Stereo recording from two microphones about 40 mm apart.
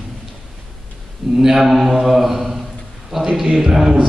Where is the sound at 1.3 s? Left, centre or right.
Centre.